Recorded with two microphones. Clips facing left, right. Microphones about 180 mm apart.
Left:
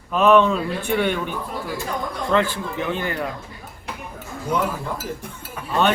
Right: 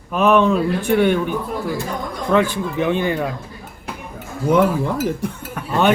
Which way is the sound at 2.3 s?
15° right (ahead or behind).